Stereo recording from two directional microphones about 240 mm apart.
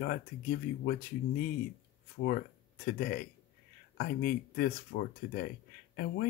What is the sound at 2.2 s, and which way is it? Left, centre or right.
Speech, left.